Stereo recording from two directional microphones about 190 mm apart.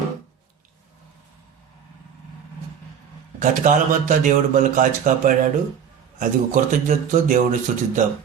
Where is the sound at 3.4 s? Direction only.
45° right (ahead or behind).